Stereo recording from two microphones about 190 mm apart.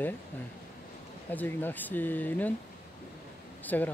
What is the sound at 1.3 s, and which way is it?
Speech, 10° left (ahead or behind).